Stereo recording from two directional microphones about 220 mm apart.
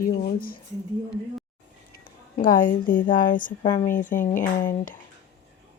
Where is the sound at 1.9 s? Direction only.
40° left (ahead or behind).